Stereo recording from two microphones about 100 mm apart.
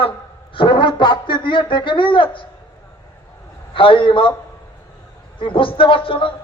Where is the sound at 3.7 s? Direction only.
60° left (ahead or behind).